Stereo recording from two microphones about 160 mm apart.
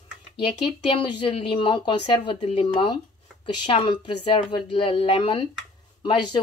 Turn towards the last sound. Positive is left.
turn(degrees=30)  # may be behind; listen again after turning